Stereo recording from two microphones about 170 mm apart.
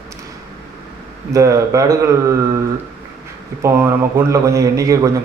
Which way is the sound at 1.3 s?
20° right (ahead or behind).